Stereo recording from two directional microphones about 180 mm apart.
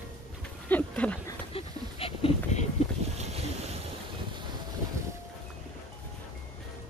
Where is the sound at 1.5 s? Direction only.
30° left (ahead or behind).